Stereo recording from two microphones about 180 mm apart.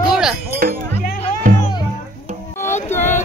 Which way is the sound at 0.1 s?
5° right (ahead or behind).